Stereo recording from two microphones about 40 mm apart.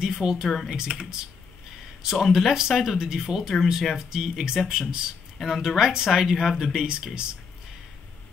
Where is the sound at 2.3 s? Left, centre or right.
Centre.